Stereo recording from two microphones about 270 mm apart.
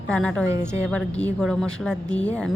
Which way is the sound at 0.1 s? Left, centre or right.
Centre.